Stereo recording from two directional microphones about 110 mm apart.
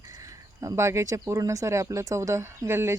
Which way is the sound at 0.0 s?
30° right (ahead or behind).